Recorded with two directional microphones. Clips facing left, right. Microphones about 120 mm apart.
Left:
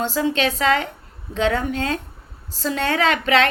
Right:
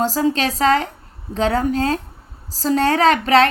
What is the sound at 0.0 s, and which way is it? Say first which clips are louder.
Speech: right 2 dB; 40° right (ahead or behind).